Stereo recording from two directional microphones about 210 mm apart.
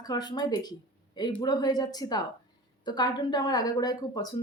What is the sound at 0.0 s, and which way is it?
A woman's voice, 20° left (ahead or behind).